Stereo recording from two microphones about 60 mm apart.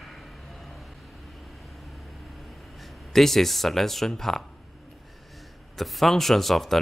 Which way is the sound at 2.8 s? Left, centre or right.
Centre.